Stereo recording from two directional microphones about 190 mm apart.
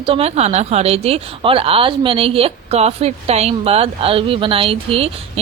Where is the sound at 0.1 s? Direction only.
35° right (ahead or behind).